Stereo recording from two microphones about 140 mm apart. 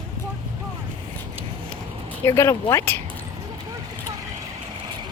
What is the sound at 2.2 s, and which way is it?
Speech, 20° left (ahead or behind).